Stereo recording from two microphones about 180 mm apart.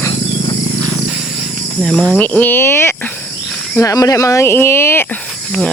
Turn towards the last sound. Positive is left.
turn(degrees=15)  # may be behind; listen again after turning